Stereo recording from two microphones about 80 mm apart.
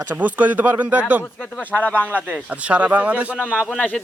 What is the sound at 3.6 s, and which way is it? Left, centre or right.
Speech, centre.